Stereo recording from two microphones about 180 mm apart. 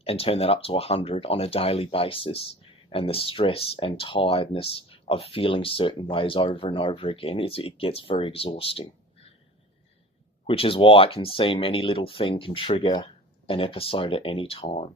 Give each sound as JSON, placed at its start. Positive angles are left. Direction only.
{"t": 0.0, "sound": "speech", "side_deg": 35}
{"t": 10.4, "sound": "speech", "side_deg": 30}